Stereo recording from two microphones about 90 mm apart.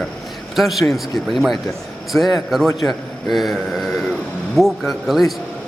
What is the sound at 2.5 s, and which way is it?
A man's voice, centre (ahead or behind).